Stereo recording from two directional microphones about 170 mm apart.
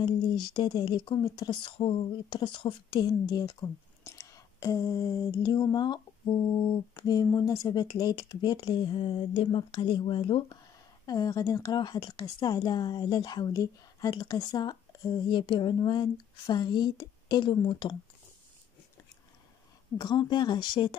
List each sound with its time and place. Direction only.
0.5 s speech: 25° left (ahead or behind)
7.0 s speech: 25° left (ahead or behind)
20.0 s speech: 25° left (ahead or behind)